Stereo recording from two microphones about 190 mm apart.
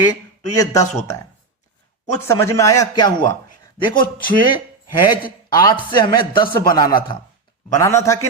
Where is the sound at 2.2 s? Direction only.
15° left (ahead or behind).